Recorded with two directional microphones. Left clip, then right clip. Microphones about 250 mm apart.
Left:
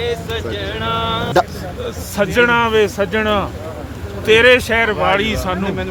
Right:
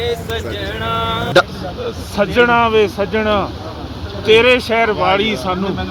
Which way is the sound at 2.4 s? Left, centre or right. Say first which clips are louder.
Right 1 dB; left.